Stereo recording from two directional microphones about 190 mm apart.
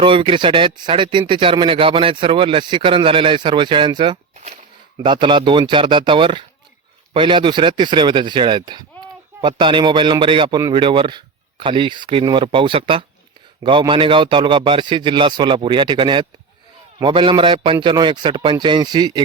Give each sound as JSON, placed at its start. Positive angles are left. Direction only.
{"t": 0.0, "sound": "speech", "side_deg": -25}